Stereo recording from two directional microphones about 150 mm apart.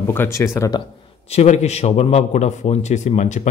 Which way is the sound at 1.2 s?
50° left (ahead or behind).